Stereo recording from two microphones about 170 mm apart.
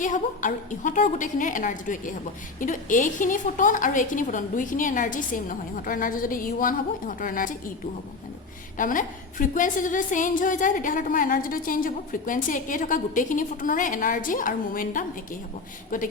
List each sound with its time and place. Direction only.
0.0 s a woman's voice: 50° left (ahead or behind)
8.8 s a woman's voice: 50° left (ahead or behind)